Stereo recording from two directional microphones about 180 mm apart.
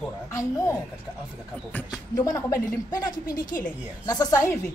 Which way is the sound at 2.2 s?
15° left (ahead or behind).